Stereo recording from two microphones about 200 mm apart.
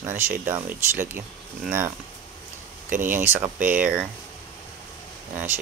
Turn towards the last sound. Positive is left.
turn(degrees=-10)  # may be behind; listen again after turning